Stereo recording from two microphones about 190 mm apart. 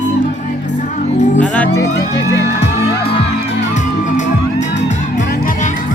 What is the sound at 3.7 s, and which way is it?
Music, 40° left (ahead or behind).